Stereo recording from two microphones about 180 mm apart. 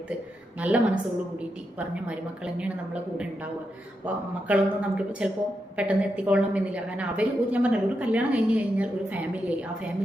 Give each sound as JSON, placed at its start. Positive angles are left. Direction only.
{"t": 0.6, "sound": "a woman's voice", "side_deg": -10}
{"t": 2.0, "sound": "a woman's voice", "side_deg": -5}